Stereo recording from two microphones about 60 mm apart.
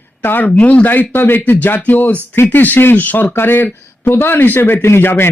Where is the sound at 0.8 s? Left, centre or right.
Left.